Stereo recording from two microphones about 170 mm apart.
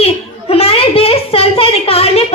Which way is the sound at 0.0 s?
35° left (ahead or behind).